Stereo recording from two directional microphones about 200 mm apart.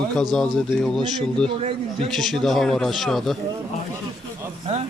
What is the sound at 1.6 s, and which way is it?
Speech, 30° right (ahead or behind).